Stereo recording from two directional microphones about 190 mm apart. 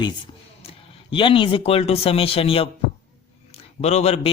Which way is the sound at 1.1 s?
25° left (ahead or behind).